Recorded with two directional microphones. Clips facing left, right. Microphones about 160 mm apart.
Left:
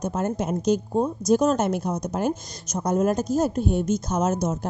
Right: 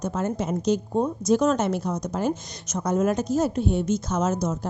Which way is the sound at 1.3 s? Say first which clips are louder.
Left 1 dB; 45° left (ahead or behind).